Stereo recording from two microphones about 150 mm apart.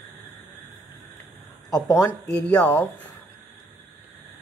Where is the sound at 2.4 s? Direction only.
10° left (ahead or behind).